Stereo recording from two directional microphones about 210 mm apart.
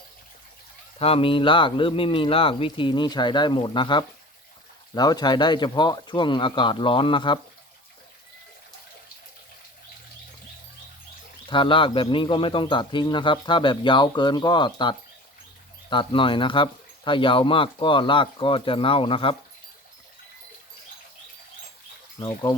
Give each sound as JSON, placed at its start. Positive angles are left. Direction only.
{"t": 0.9, "sound": "speech", "side_deg": 30}
{"t": 11.4, "sound": "speech", "side_deg": 25}